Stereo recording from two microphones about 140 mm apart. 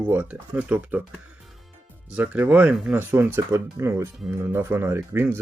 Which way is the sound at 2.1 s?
10° right (ahead or behind).